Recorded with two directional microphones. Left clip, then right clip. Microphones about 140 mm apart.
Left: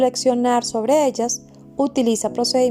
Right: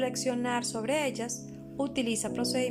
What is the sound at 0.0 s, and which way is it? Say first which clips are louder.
A woman's voice: left 13 dB; 45° left (ahead or behind).